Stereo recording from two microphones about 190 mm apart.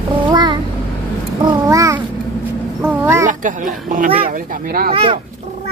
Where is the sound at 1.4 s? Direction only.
20° right (ahead or behind).